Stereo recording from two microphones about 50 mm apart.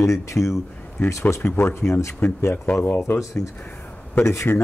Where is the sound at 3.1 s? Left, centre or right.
Left.